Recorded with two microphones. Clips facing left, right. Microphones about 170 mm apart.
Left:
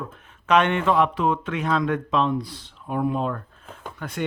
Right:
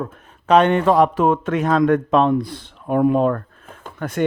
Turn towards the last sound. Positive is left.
turn(degrees=-50)  # may be behind; listen again after turning